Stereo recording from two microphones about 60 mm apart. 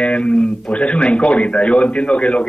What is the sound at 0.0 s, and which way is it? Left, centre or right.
Speech, centre.